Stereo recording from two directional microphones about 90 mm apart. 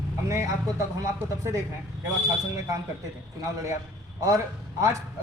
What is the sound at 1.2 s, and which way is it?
Speech, 35° right (ahead or behind).